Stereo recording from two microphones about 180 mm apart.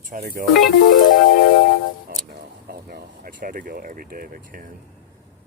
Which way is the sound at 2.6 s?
55° right (ahead or behind).